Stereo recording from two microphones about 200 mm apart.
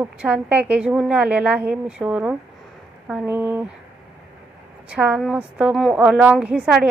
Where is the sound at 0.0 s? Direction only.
5° right (ahead or behind).